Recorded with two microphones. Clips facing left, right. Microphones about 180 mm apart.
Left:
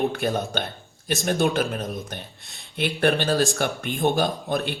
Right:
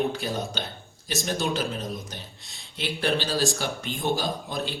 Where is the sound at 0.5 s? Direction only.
55° left (ahead or behind).